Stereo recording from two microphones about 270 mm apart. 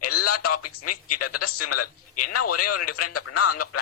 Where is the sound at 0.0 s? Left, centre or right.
Left.